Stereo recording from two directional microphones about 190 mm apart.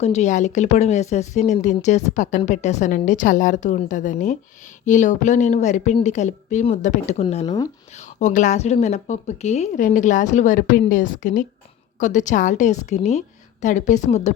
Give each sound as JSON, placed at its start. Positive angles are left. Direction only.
{"t": 0.0, "sound": "a woman's voice", "side_deg": 35}
{"t": 7.4, "sound": "speech", "side_deg": 20}
{"t": 7.9, "sound": "a woman's voice", "side_deg": 40}